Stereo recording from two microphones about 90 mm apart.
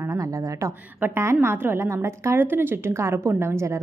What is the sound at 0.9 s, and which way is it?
A woman's voice, 25° right (ahead or behind).